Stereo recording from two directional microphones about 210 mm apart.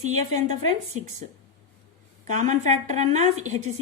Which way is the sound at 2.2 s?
35° right (ahead or behind).